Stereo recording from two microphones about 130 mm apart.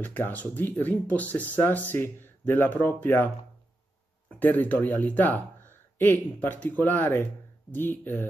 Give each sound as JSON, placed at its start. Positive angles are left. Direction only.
{"t": 0.0, "sound": "speech", "side_deg": 15}
{"t": 4.3, "sound": "speech", "side_deg": 15}